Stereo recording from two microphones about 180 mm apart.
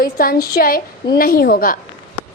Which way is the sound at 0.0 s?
55° left (ahead or behind).